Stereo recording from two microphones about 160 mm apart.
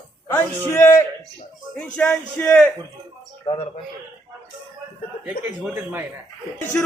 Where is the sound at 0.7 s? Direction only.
15° left (ahead or behind).